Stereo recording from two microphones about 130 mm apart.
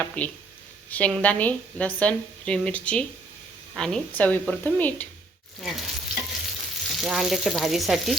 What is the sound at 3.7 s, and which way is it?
Frying, 5° left (ahead or behind).